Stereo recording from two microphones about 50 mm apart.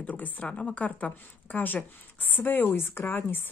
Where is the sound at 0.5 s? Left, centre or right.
Left.